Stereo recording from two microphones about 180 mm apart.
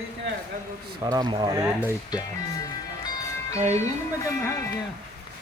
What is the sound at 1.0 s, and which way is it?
Speech, 25° right (ahead or behind).